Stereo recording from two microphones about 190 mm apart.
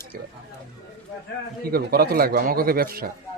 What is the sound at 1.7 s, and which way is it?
Speech, 55° right (ahead or behind).